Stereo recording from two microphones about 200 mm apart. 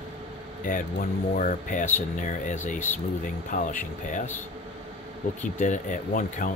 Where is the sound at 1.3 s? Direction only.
40° left (ahead or behind).